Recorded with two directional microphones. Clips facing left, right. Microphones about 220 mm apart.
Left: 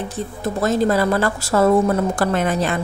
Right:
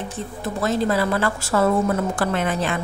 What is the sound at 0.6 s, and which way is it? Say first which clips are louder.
A woman's voice: left 3 dB; 45° left (ahead or behind).